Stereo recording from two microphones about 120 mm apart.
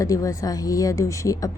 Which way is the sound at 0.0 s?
30° left (ahead or behind).